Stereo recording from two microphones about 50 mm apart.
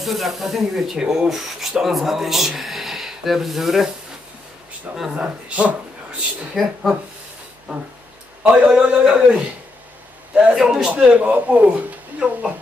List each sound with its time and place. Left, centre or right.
0.0 s a man's voice: centre
5.1 s speech: right
6.5 s speech: centre
7.7 s a man's voice: centre
8.5 s speech: right
8.7 s speech: centre
10.5 s a man's voice: centre
10.9 s speech: right